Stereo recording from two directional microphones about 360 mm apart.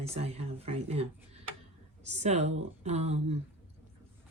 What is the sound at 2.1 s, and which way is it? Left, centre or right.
Speech, centre.